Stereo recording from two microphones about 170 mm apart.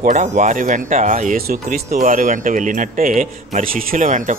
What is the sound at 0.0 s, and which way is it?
Speech, 45° right (ahead or behind).